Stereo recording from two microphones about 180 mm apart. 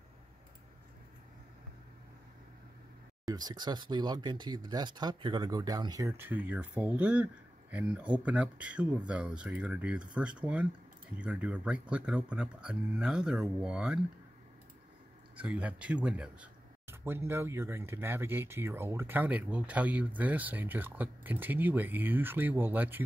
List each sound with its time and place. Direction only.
3.3 s speech: 20° right (ahead or behind); by 13.9 s 5° right (ahead or behind)
15.3 s speech: 5° right (ahead or behind)